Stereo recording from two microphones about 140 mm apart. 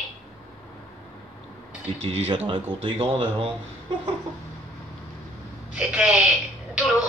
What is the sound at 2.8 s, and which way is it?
Speech, 40° right (ahead or behind).